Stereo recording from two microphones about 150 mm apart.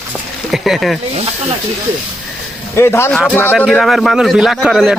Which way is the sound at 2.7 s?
15° left (ahead or behind).